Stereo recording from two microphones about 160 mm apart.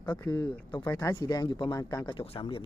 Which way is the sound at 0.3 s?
25° left (ahead or behind).